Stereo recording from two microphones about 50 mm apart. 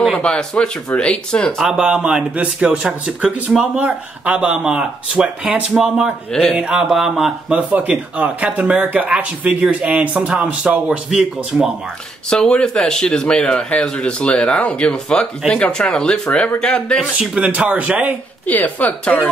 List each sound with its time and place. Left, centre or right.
0.1 s speech: centre
1.6 s speech: centre
6.6 s speech: centre
7.5 s speech: right
8.9 s speech: right
12.4 s speech: centre
17.5 s speech: right
18.5 s speech: left